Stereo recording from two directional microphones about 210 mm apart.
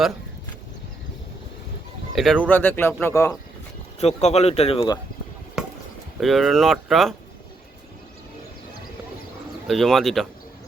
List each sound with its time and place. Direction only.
2.1 s speech: centre (ahead or behind)
4.0 s speech: 30° left (ahead or behind)
5.6 s chop: centre (ahead or behind)
6.1 s speech: centre (ahead or behind)
9.6 s speech: centre (ahead or behind)